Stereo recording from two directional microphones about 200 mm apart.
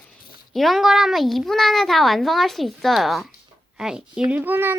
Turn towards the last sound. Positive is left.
turn(degrees=-10)  # may be behind; listen again after turning